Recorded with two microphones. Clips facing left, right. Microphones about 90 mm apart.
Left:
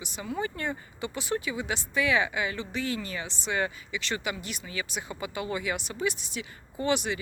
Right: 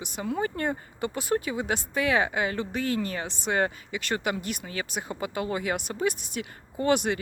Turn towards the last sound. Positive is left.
turn(degrees=-55)  # may be behind; listen again after turning